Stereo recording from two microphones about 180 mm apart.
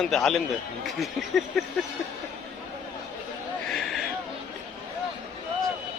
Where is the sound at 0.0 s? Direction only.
Centre (ahead or behind).